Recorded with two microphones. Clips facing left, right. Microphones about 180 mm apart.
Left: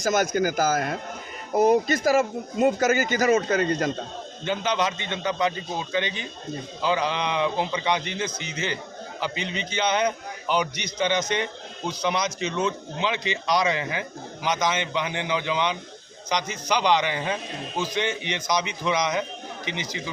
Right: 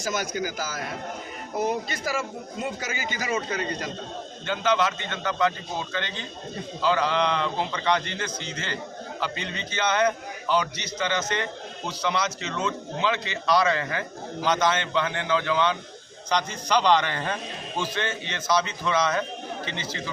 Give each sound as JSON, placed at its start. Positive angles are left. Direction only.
{"t": 0.0, "sound": "speech", "side_deg": 45}
{"t": 4.4, "sound": "speech", "side_deg": 15}